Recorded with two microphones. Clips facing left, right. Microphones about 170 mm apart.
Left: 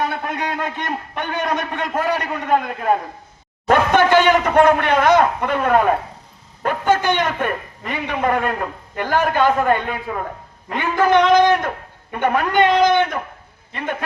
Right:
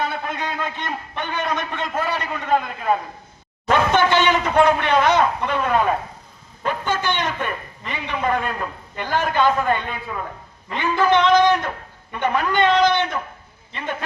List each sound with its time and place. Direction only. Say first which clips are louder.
0.1 s a man's voice: left 3 dB; 60° left (ahead or behind)
4.1 s a man's voice: left 4 dB; 45° left (ahead or behind)
13.7 s a man's voice: left 3 dB; 55° left (ahead or behind)